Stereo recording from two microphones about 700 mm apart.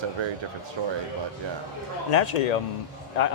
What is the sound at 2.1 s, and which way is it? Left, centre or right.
Speech, left.